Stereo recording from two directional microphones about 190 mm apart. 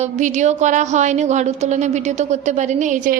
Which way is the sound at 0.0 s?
40° right (ahead or behind).